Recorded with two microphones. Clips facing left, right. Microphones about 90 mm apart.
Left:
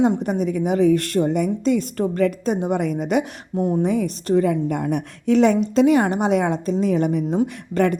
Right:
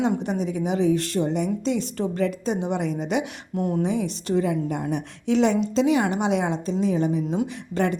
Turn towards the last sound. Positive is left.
turn(degrees=50)  # may be behind; listen again after turning